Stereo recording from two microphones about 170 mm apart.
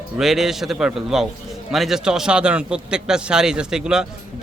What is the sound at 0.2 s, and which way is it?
A man's voice, centre (ahead or behind).